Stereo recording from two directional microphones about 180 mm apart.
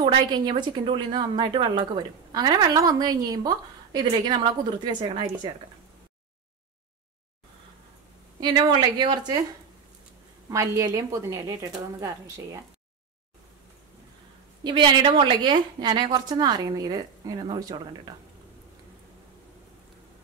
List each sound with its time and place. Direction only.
0.0 s a woman's voice: 25° right (ahead or behind)
8.4 s a woman's voice: 25° right (ahead or behind)
10.5 s a woman's voice: 15° right (ahead or behind)
14.6 s a woman's voice: 25° right (ahead or behind)